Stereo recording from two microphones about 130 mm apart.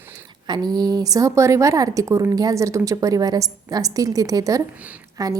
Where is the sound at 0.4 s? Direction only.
35° right (ahead or behind).